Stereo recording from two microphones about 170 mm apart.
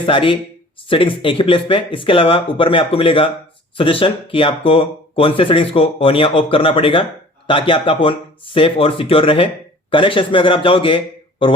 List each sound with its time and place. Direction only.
0.0 s speech: 30° left (ahead or behind)